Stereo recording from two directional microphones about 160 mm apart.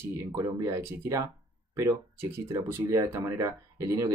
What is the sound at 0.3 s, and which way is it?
Speech, 25° right (ahead or behind).